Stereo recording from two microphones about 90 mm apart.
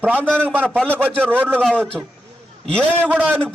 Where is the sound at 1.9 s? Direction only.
5° left (ahead or behind).